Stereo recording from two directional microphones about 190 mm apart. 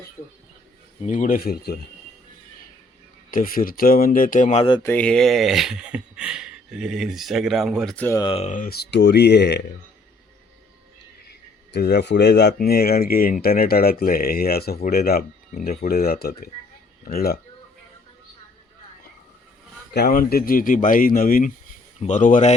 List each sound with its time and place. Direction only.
1.0 s speech: 40° left (ahead or behind)
3.3 s speech: 50° left (ahead or behind); by 4.8 s 30° left (ahead or behind)
4.8 s speech: 10° left (ahead or behind)
8.2 s speech: 30° left (ahead or behind)
8.5 s speech: 50° left (ahead or behind)
11.3 s speech: 60° left (ahead or behind)
19.9 s speech: 55° left (ahead or behind)